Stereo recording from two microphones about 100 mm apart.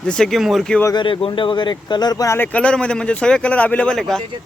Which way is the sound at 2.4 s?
15° left (ahead or behind).